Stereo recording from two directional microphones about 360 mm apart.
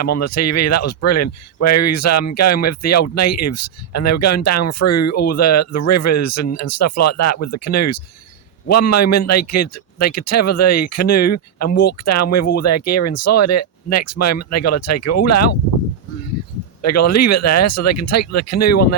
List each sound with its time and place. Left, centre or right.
0.0 s speech: left
16.8 s speech: left